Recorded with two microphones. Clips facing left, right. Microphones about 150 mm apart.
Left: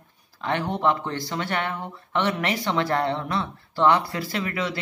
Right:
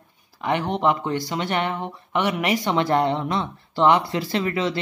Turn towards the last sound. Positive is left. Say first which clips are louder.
# right 4 dB
turn(degrees=-30)  # may be behind; listen again after turning